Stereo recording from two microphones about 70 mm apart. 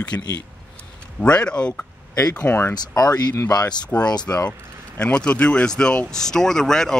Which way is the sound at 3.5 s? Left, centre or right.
Left.